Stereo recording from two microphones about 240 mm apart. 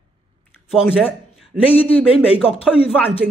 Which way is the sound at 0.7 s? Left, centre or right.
Centre.